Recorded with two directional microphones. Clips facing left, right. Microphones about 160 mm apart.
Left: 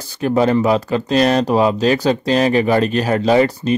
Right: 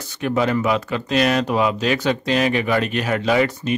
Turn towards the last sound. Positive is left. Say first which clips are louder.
# left 5 dB
turn(degrees=35)  # may be behind; listen again after turning